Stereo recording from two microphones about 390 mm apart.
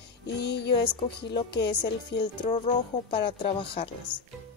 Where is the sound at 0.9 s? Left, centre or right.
Centre.